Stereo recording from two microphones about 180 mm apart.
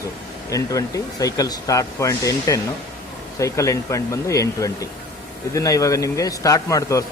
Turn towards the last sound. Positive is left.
turn(degrees=15)  # may be behind; listen again after turning